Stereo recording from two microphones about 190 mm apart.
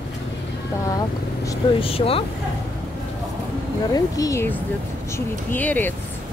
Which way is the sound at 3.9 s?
20° left (ahead or behind).